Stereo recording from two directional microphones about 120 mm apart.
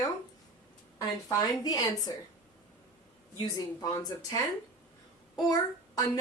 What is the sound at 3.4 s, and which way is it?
A child's voice, 30° left (ahead or behind).